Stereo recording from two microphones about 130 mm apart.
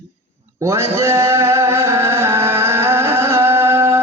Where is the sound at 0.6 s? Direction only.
20° right (ahead or behind).